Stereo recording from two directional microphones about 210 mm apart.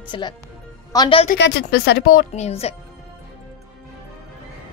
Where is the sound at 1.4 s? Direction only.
50° left (ahead or behind).